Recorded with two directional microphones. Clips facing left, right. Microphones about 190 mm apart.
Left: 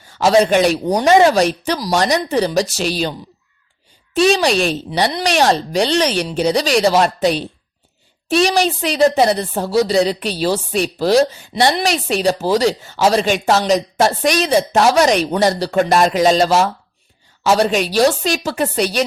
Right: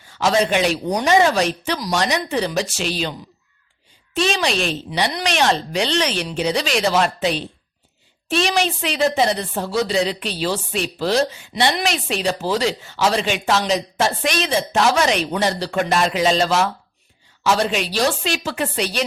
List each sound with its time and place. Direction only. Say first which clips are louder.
0.2 s a woman's voice: left 5 dB; 40° left (ahead or behind)